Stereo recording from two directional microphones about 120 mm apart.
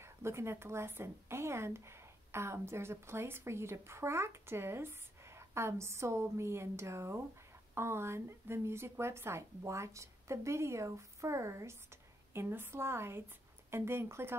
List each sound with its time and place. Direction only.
0.0 s a woman's voice: 20° right (ahead or behind)